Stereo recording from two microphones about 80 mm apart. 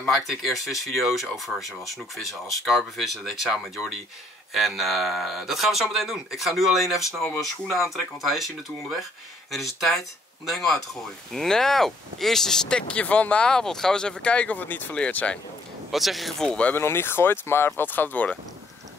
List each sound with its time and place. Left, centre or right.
0.1 s speech: centre
2.6 s speech: centre
15.9 s speech: centre
16.7 s speech: left